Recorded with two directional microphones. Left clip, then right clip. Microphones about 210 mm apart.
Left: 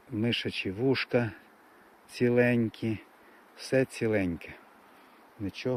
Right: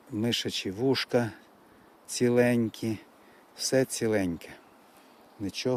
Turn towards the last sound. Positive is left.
turn(degrees=-20)  # may be behind; listen again after turning